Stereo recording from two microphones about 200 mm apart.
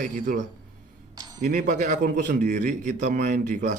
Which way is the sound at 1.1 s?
20° right (ahead or behind).